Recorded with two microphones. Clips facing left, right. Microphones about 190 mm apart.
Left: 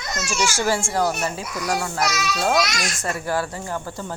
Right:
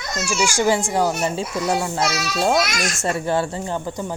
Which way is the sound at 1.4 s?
25° right (ahead or behind).